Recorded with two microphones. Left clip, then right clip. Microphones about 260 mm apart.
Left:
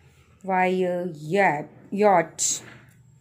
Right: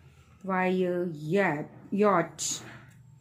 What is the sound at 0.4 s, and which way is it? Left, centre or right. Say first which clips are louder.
Speech: left 6 dB; centre.